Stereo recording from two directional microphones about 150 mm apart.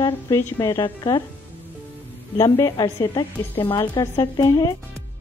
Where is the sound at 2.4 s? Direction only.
20° left (ahead or behind).